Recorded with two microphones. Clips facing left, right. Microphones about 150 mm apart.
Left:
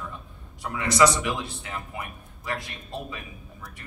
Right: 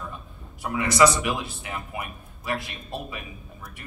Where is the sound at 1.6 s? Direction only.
15° right (ahead or behind).